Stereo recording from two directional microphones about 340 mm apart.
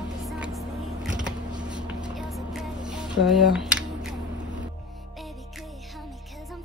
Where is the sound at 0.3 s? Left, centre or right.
Centre.